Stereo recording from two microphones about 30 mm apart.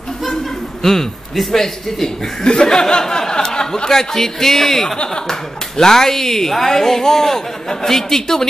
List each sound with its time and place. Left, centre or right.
0.8 s speech: centre
1.3 s a man's voice: centre
2.4 s speech: left
4.9 s speech: left
5.2 s speech: centre